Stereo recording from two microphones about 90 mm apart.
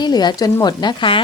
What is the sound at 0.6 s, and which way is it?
Speech, 55° left (ahead or behind).